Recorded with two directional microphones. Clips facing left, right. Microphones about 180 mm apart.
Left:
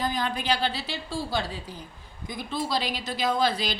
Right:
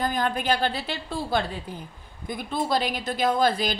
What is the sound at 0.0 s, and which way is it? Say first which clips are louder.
A woman's voice: right 3 dB; 50° right (ahead or behind).